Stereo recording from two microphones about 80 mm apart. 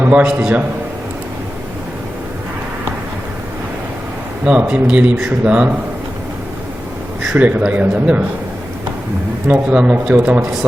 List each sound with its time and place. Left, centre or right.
0.0 s speech: centre
4.4 s speech: centre
7.3 s speech: centre
9.5 s speech: centre